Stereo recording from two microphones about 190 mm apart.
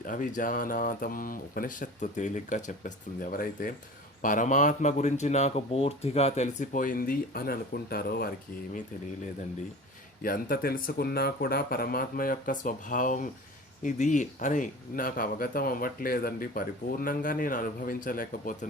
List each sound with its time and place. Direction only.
0.0 s speech: 45° left (ahead or behind)
10.2 s speech: 50° left (ahead or behind)